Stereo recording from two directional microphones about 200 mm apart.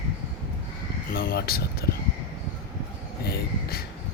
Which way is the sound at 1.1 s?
50° left (ahead or behind).